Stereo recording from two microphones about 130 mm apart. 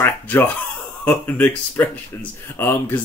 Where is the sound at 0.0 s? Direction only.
15° left (ahead or behind).